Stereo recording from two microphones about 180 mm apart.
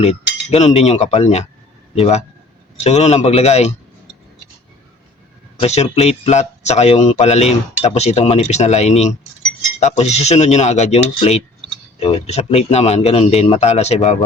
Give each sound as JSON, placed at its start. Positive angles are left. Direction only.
{"t": 0.0, "sound": "speech", "side_deg": 35}
{"t": 5.5, "sound": "speech", "side_deg": 35}